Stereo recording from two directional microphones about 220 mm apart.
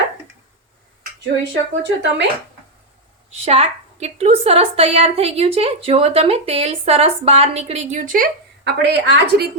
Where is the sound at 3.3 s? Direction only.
25° right (ahead or behind).